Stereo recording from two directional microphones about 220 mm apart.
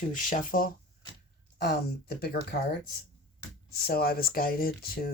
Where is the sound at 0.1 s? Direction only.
35° left (ahead or behind).